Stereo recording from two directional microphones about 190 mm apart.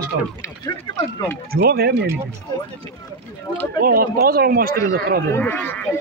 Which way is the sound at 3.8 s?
50° right (ahead or behind).